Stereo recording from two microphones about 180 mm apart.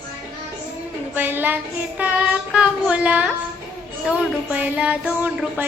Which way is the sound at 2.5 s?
5° right (ahead or behind).